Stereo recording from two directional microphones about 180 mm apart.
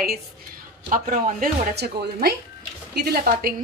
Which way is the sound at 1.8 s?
60° right (ahead or behind).